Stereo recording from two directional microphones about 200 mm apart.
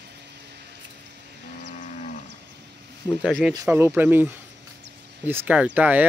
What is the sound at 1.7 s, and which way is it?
Moo, 35° left (ahead or behind).